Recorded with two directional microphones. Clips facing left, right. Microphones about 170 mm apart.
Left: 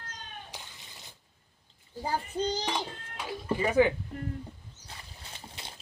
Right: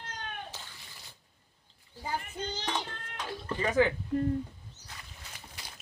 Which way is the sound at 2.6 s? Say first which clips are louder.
Left 2 dB; 10° left (ahead or behind).